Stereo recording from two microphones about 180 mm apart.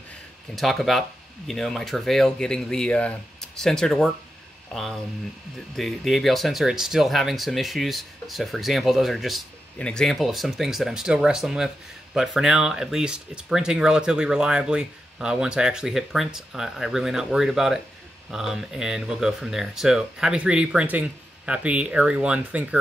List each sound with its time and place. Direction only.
0.6 s speech: centre (ahead or behind)